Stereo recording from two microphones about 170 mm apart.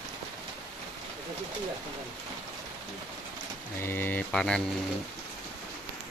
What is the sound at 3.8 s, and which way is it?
Mantra, 15° left (ahead or behind).